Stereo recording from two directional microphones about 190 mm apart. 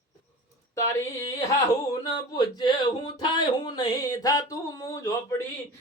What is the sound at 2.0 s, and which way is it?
Speech, 20° left (ahead or behind).